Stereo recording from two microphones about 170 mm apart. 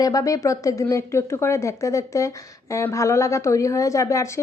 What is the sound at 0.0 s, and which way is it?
Speech, 20° left (ahead or behind).